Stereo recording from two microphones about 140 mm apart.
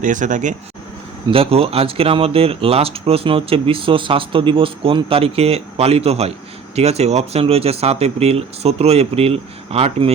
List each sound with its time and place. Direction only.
0.0 s speech: 65° right (ahead or behind)
1.3 s speech: 45° right (ahead or behind)